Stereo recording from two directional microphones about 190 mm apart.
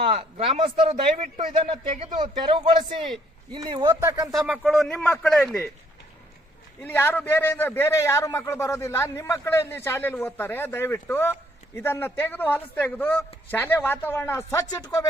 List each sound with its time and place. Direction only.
0.0 s speech: 30° right (ahead or behind)
4.4 s speech: 10° right (ahead or behind)
6.8 s a man's voice: 10° left (ahead or behind)